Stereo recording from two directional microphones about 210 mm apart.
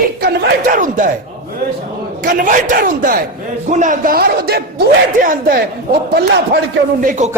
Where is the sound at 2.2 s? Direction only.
40° right (ahead or behind).